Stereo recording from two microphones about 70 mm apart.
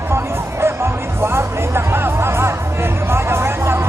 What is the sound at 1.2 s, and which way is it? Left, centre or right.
Music, right.